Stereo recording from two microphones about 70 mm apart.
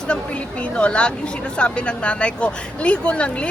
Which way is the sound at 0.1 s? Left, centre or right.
Centre.